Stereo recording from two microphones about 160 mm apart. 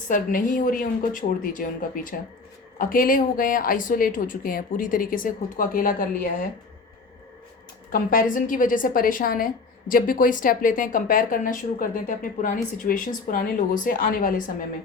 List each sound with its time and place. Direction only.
0.1 s speech: 55° left (ahead or behind)
2.7 s speech: 60° left (ahead or behind)
7.9 s speech: 60° left (ahead or behind)